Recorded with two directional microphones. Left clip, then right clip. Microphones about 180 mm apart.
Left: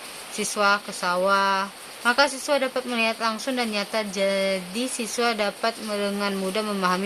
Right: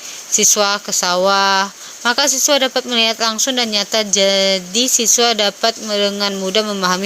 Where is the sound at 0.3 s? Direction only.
40° right (ahead or behind).